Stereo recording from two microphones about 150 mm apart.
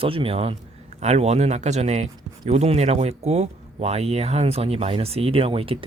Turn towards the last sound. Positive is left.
turn(degrees=-40)  # may be behind; listen again after turning